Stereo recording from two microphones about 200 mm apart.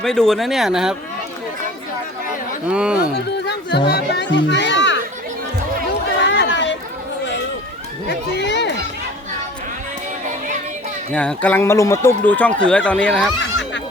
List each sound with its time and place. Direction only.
0.0 s speech: centre (ahead or behind)
2.6 s speech: 5° right (ahead or behind)
3.4 s speech: 55° left (ahead or behind)
5.9 s chatter: 60° left (ahead or behind)
8.0 s a sound: 60° left (ahead or behind)
11.1 s speech: 5° left (ahead or behind)